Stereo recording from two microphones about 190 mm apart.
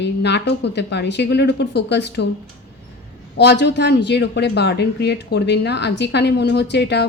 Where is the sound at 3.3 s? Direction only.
65° left (ahead or behind).